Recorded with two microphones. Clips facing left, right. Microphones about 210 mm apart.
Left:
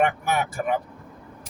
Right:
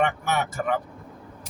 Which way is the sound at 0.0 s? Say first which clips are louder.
Left 2 dB; 10° left (ahead or behind).